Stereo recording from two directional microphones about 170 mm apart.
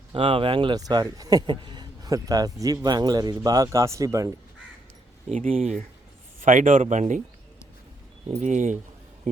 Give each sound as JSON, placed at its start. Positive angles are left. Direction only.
{"t": 0.1, "sound": "speech", "side_deg": -30}
{"t": 5.3, "sound": "speech", "side_deg": -40}
{"t": 8.4, "sound": "speech", "side_deg": -45}